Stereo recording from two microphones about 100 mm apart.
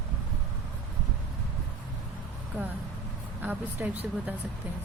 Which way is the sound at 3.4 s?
15° right (ahead or behind).